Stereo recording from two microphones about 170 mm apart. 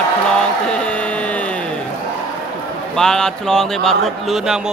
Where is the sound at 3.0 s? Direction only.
5° left (ahead or behind).